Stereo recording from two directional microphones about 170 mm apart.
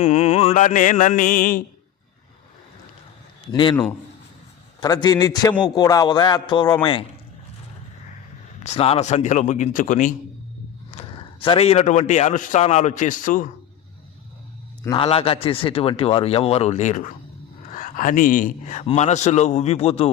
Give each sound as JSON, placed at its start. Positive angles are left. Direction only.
{"t": 0.0, "sound": "speech", "side_deg": 40}
{"t": 3.5, "sound": "a man's voice", "side_deg": 30}
{"t": 4.8, "sound": "a man's voice", "side_deg": 25}
{"t": 8.6, "sound": "speech", "side_deg": 35}
{"t": 10.9, "sound": "a sound", "side_deg": 40}
{"t": 11.4, "sound": "speech", "side_deg": 35}
{"t": 14.8, "sound": "a man's voice", "side_deg": 30}